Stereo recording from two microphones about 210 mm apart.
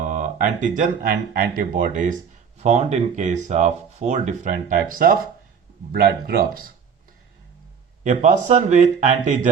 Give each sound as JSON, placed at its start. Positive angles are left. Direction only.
{"t": 0.0, "sound": "a sound", "side_deg": -35}
{"t": 0.8, "sound": "speech", "side_deg": -45}
{"t": 8.0, "sound": "speech", "side_deg": -35}